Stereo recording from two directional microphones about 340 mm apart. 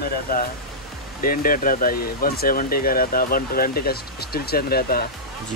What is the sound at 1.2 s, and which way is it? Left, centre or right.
Speech, left.